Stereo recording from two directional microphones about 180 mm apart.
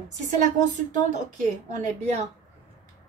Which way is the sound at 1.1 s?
45° right (ahead or behind).